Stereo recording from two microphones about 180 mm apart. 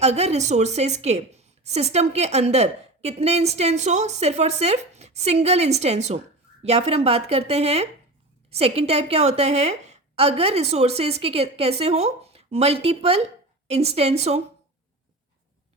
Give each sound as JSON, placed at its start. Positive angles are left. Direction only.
{"t": 0.0, "sound": "a woman's voice", "side_deg": -35}